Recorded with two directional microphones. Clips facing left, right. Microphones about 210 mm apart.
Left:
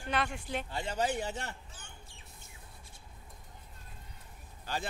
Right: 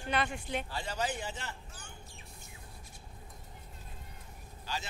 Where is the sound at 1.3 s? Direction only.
60° left (ahead or behind).